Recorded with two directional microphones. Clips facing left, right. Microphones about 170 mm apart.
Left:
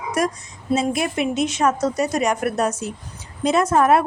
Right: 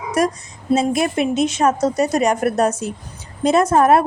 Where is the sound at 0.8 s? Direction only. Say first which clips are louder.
Right 3 dB; 35° right (ahead or behind).